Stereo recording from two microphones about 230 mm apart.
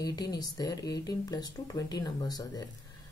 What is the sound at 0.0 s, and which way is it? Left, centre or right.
Speech, centre.